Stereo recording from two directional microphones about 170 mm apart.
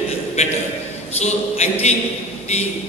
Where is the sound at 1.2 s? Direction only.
40° left (ahead or behind).